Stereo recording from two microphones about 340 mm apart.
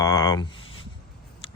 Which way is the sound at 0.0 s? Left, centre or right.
Centre.